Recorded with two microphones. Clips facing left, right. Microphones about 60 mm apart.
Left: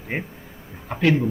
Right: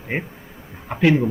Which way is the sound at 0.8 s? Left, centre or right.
Centre.